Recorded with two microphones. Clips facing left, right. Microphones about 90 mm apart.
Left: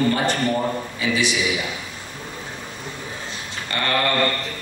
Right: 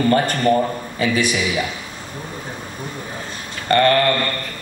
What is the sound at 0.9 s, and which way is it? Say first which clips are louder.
Speech: right 6 dB; 45° right (ahead or behind).